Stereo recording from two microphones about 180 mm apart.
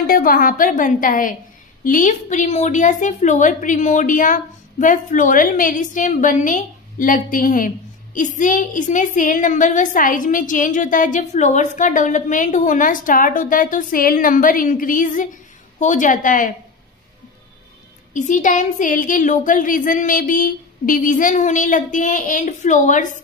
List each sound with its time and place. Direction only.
0.0 s a woman's voice: 50° left (ahead or behind)
18.1 s a woman's voice: 45° left (ahead or behind)